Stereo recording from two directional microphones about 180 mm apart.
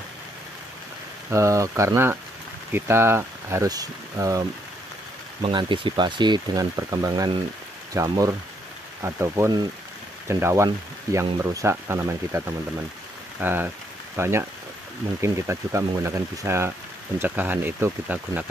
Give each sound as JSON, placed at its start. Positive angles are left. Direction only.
{"t": 1.3, "sound": "speech", "side_deg": -15}